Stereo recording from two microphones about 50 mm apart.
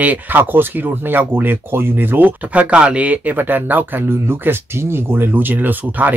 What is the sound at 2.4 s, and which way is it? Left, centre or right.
Speech, right.